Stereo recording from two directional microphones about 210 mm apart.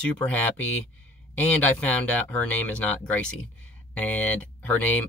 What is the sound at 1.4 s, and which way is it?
Speech, 5° left (ahead or behind).